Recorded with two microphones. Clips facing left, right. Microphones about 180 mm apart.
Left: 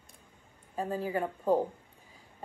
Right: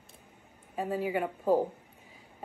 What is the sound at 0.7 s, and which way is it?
Speech, 5° right (ahead or behind).